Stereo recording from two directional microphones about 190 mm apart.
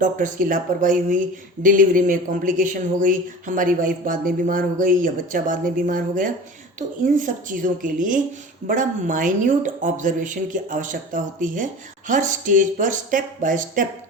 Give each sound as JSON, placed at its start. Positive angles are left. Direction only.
{"t": 0.0, "sound": "speech", "side_deg": -45}